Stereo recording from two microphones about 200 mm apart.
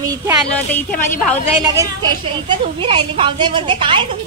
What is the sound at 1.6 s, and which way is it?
A woman's voice, 15° right (ahead or behind).